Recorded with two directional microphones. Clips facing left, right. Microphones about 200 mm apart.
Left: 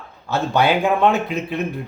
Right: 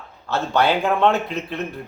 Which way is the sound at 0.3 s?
15° left (ahead or behind).